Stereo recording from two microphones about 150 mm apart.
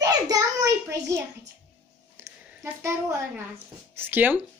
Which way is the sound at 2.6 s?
20° right (ahead or behind).